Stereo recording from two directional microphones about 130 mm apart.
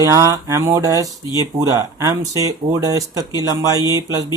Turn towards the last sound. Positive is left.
turn(degrees=-25)  # may be behind; listen again after turning